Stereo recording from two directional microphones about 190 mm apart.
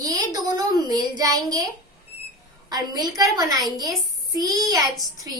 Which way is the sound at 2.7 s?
20° right (ahead or behind).